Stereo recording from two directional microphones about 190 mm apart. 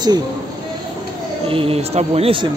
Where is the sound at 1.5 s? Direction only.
30° right (ahead or behind).